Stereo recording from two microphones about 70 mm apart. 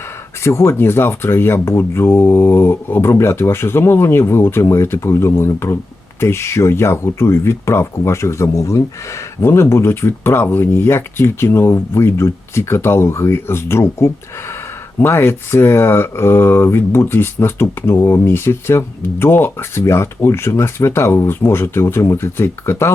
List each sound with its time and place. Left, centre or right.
0.4 s speech: left